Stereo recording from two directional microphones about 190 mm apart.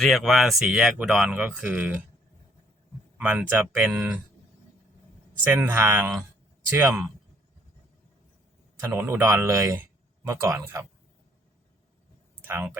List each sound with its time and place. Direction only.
0.0 s speech: centre (ahead or behind)
3.2 s speech: 5° right (ahead or behind)
5.5 s speech: 10° right (ahead or behind)
8.8 s speech: 15° right (ahead or behind)
12.5 s speech: 10° right (ahead or behind)